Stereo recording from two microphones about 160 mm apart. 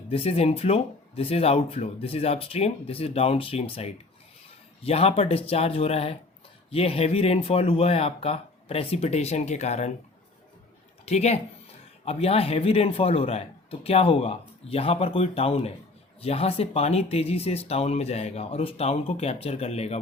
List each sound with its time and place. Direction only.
0.1 s speech: 40° left (ahead or behind)
11.0 s speech: 45° left (ahead or behind)